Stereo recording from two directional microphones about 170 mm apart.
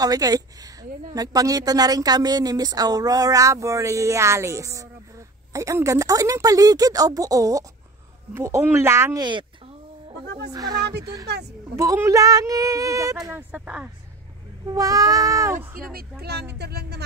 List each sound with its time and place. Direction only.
0.0 s speech: 20° right (ahead or behind)
10.5 s speech: 20° right (ahead or behind)
14.7 s speech: 20° right (ahead or behind)
15.8 s speech: 60° right (ahead or behind)